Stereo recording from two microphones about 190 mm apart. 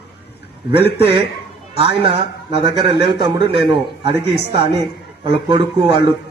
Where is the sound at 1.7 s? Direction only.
30° right (ahead or behind).